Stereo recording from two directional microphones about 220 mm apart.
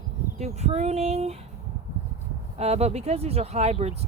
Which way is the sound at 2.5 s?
30° right (ahead or behind).